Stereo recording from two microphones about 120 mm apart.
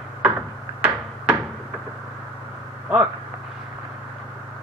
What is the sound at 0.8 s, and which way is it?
Cupboard open or close, 10° right (ahead or behind).